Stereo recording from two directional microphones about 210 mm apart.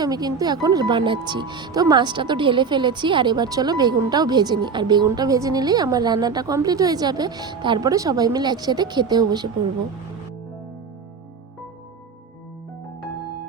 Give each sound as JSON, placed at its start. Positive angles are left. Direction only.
{"t": 0.0, "sound": "speech", "side_deg": -20}